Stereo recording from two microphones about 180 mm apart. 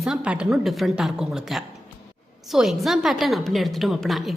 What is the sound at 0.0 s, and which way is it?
A woman's voice, 5° right (ahead or behind).